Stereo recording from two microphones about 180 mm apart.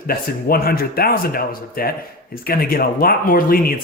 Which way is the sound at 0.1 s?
55° left (ahead or behind).